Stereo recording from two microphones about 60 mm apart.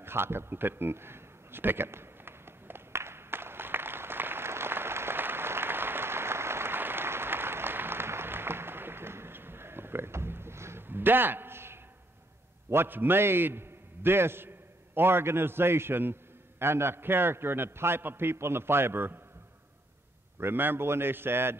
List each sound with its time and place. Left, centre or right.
0.0 s a sound: right
12.6 s a man's voice: right
20.3 s a man's voice: right